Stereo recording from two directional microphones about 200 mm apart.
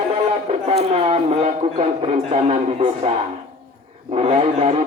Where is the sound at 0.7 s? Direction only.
30° right (ahead or behind).